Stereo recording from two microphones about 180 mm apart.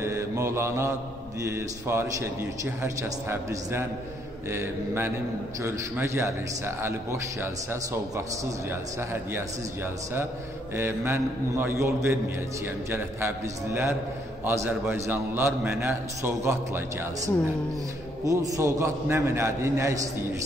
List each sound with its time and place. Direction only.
0.0 s mantra: 15° right (ahead or behind)
1.4 s a man's voice: 15° right (ahead or behind)
10.8 s a man's voice: 15° right (ahead or behind)
18.3 s a man's voice: 20° right (ahead or behind)